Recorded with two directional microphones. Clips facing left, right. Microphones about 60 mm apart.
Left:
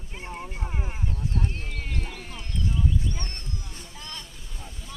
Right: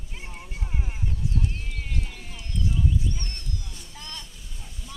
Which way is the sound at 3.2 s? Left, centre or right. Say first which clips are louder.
Left 1 dB; left.